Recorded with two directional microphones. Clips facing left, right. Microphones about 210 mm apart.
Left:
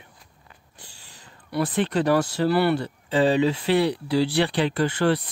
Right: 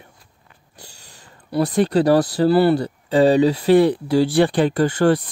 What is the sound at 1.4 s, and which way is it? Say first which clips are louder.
Speech: right 6 dB; 35° right (ahead or behind).